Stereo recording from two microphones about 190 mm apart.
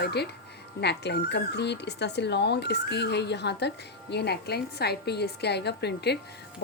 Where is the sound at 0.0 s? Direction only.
60° left (ahead or behind).